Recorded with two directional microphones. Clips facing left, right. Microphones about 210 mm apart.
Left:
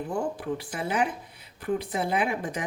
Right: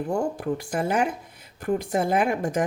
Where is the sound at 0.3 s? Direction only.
45° right (ahead or behind).